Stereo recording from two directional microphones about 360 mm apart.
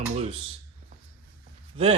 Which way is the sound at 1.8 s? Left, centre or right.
Centre.